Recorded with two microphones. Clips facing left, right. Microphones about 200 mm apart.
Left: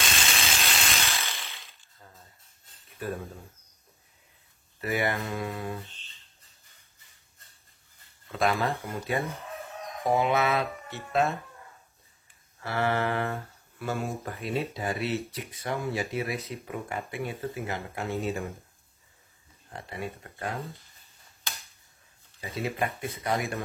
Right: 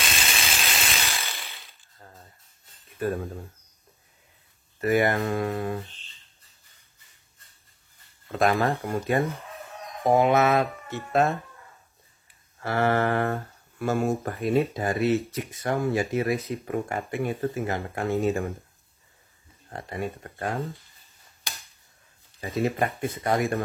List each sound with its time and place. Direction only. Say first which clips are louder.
0.0 s ratchet: right 1 dB; centre (ahead or behind)
3.0 s speech: right 6 dB; 45° right (ahead or behind)
4.7 s speech: right 7 dB; 50° right (ahead or behind)
8.3 s speech: right 4 dB; 45° right (ahead or behind)
12.6 s speech: right 4 dB; 50° right (ahead or behind)
19.7 s speech: right 5 dB; 45° right (ahead or behind)
22.4 s speech: right 5 dB; 50° right (ahead or behind)